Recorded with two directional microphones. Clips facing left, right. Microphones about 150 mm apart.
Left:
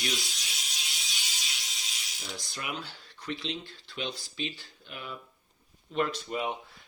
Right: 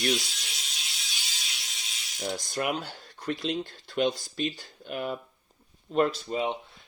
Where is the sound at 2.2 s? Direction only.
45° right (ahead or behind); by 6.5 s 30° right (ahead or behind).